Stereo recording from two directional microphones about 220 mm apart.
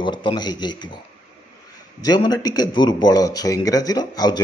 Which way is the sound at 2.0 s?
20° left (ahead or behind).